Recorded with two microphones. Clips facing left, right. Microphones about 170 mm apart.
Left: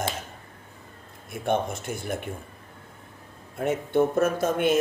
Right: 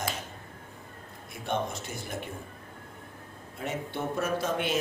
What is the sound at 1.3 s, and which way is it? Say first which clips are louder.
Speech: left 6 dB; 55° left (ahead or behind).